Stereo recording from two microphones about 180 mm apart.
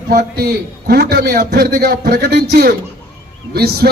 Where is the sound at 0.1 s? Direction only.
60° right (ahead or behind).